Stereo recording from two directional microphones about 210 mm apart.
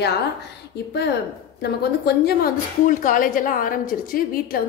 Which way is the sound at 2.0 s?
45° left (ahead or behind).